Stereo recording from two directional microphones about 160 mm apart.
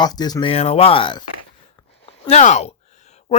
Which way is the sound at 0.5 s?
40° left (ahead or behind).